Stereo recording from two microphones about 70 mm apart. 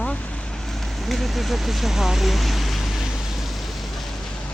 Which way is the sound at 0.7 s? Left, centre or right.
Centre.